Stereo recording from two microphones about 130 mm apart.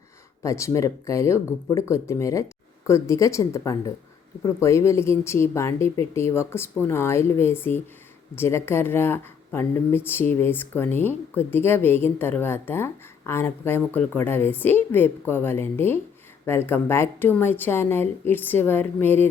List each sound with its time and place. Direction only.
0.4 s speech: 25° left (ahead or behind)